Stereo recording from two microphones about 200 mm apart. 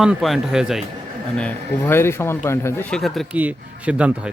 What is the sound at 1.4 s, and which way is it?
Speech, 10° left (ahead or behind).